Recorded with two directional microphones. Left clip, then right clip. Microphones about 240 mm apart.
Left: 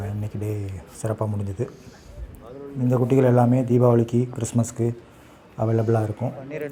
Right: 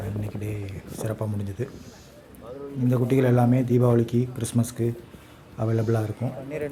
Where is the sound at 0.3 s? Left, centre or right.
Centre.